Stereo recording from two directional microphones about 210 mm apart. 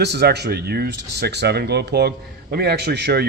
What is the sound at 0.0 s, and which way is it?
Speech, 50° right (ahead or behind).